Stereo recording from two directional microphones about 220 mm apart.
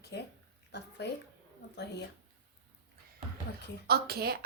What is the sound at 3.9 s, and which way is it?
Speech, 45° right (ahead or behind).